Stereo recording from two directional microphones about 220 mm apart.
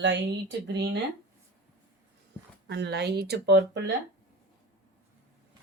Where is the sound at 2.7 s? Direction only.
50° right (ahead or behind).